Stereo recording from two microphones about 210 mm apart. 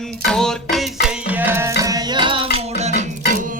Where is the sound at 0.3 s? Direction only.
Centre (ahead or behind).